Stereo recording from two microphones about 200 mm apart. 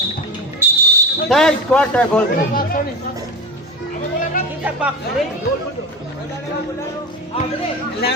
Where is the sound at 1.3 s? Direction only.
5° left (ahead or behind).